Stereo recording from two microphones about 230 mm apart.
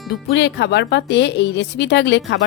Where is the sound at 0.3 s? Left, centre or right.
Left.